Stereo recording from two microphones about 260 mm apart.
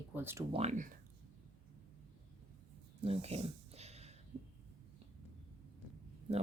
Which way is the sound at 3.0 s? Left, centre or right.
Right.